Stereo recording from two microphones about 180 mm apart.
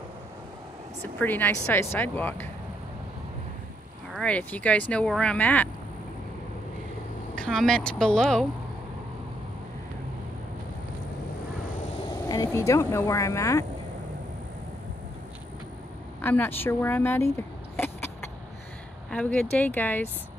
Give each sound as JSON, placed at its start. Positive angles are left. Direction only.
{"t": 1.2, "sound": "speech", "side_deg": 10}
{"t": 4.1, "sound": "speech", "side_deg": 5}
{"t": 7.3, "sound": "speech", "side_deg": 5}
{"t": 12.3, "sound": "speech", "side_deg": 20}
{"t": 16.2, "sound": "speech", "side_deg": 10}
{"t": 17.7, "sound": "a sound", "side_deg": 10}
{"t": 19.0, "sound": "speech", "side_deg": 5}